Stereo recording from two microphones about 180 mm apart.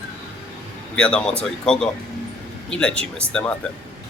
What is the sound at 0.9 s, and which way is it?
Speech, 5° left (ahead or behind).